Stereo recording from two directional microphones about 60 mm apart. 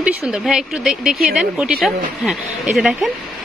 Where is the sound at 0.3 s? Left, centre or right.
Centre.